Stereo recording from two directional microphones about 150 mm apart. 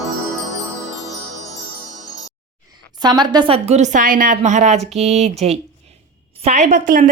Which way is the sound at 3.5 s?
45° right (ahead or behind).